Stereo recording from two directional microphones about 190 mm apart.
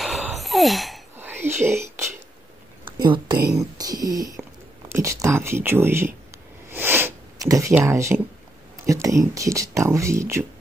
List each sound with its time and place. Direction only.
0.0 s gasp: centre (ahead or behind)
1.1 s whispering: 10° right (ahead or behind)
2.8 s a sound: 25° right (ahead or behind)
3.5 s speech: 20° right (ahead or behind)
6.7 s sniff: 10° right (ahead or behind)
8.8 s speech: 15° right (ahead or behind)